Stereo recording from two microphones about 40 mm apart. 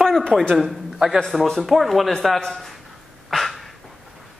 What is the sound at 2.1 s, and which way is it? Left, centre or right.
Speech, centre.